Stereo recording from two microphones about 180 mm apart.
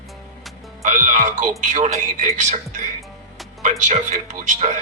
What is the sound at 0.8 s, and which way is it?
A man's voice, 45° right (ahead or behind).